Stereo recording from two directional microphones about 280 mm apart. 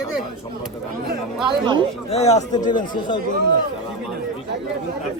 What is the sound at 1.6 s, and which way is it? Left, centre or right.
Speech, centre.